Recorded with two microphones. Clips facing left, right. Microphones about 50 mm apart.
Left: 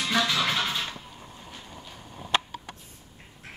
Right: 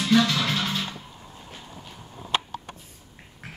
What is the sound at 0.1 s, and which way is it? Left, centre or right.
Music, centre.